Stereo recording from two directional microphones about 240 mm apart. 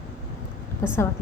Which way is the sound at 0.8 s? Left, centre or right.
Centre.